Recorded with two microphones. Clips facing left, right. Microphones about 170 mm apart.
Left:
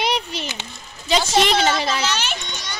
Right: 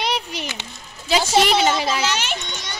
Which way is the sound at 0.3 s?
15° right (ahead or behind).